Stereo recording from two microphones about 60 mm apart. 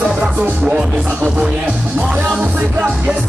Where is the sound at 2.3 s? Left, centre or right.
Right.